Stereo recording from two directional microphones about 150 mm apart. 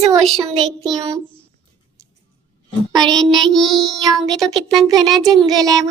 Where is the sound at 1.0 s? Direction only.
25° right (ahead or behind).